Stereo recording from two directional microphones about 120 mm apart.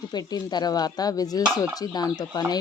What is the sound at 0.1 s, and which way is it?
Speech, 35° left (ahead or behind).